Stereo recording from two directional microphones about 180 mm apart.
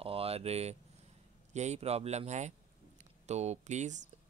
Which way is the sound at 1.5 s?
40° right (ahead or behind).